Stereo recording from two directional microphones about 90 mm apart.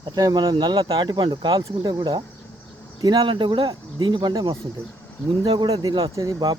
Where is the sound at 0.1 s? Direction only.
50° right (ahead or behind).